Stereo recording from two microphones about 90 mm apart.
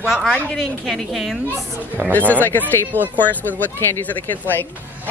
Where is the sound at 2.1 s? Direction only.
20° left (ahead or behind).